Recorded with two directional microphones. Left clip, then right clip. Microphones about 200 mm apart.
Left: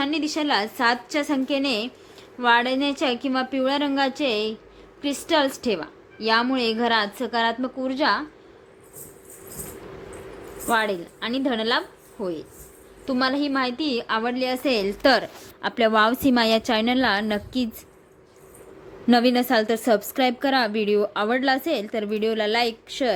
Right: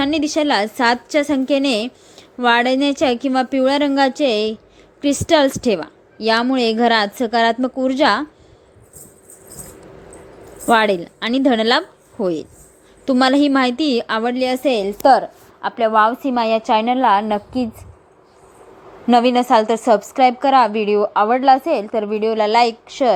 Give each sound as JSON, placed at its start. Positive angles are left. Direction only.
{"t": 0.0, "sound": "a woman's voice", "side_deg": -25}
{"t": 10.7, "sound": "a woman's voice", "side_deg": -35}
{"t": 14.7, "sound": "a woman's voice", "side_deg": -10}
{"t": 15.6, "sound": "a woman's voice", "side_deg": 20}
{"t": 19.0, "sound": "a woman's voice", "side_deg": 10}